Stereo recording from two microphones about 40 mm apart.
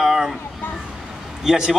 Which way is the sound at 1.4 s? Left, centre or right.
Centre.